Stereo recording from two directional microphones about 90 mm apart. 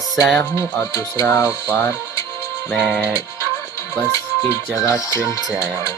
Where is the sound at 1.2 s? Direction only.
35° left (ahead or behind).